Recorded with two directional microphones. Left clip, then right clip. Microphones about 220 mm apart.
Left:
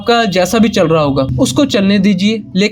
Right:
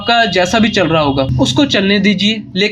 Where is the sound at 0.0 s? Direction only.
50° left (ahead or behind).